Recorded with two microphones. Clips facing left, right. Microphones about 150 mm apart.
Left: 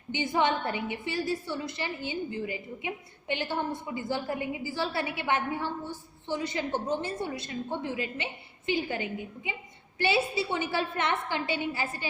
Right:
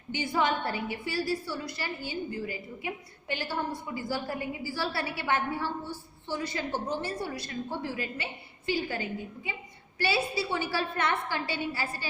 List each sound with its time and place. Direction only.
0.1 s a woman's voice: 20° left (ahead or behind)